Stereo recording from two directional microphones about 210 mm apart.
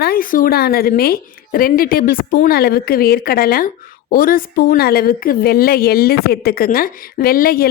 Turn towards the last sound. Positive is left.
turn(degrees=45)  # may be behind; listen again after turning